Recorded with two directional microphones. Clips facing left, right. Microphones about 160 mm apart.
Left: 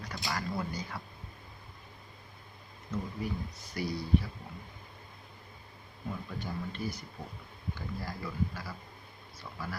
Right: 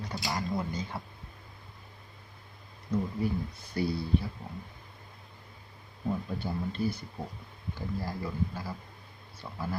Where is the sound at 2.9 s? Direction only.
35° right (ahead or behind).